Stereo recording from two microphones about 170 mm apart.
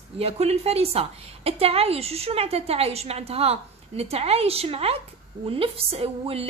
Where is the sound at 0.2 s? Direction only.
35° right (ahead or behind).